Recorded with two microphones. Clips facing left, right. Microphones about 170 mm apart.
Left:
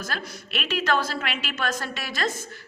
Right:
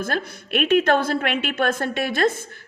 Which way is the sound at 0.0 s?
55° right (ahead or behind).